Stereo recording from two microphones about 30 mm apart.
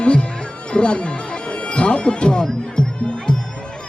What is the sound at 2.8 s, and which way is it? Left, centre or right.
Music, left.